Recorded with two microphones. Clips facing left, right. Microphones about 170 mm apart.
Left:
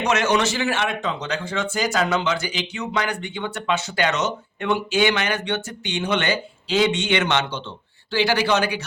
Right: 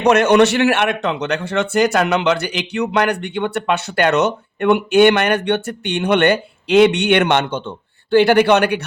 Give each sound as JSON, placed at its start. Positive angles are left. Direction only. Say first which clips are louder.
{"t": 0.0, "sound": "a man's voice", "louder": "right 9 dB", "side_deg": -60}